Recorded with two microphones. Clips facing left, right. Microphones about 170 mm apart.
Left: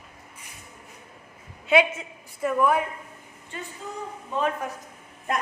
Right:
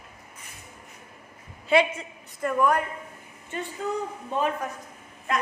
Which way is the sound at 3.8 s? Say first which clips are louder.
Right 10 dB; 65° right (ahead or behind).